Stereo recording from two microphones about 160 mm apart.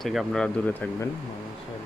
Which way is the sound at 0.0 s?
Centre (ahead or behind).